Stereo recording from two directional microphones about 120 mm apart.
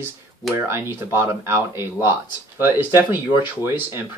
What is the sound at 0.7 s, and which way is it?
Speech, 20° right (ahead or behind).